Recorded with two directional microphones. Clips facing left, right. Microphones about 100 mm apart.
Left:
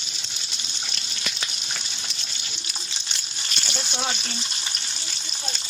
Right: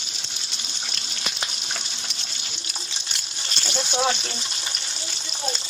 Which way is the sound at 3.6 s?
50° right (ahead or behind).